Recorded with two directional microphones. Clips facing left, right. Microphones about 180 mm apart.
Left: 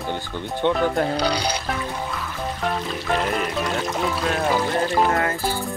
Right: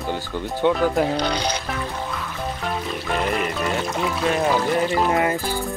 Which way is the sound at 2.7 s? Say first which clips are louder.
Even; centre (ahead or behind).